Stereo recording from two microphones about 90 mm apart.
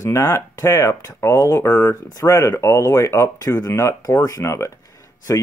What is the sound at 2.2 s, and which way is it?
Speech, 40° left (ahead or behind).